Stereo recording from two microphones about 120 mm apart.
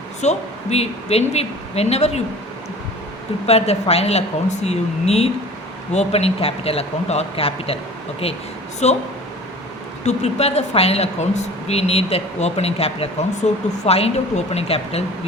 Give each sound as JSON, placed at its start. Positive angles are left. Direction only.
{"t": 0.2, "sound": "a woman's voice", "side_deg": 65}
{"t": 3.4, "sound": "a woman's voice", "side_deg": 60}
{"t": 8.8, "sound": "speech", "side_deg": 70}
{"t": 10.0, "sound": "a woman's voice", "side_deg": 65}